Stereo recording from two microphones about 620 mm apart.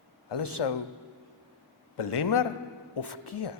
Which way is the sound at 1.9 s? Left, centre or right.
Left.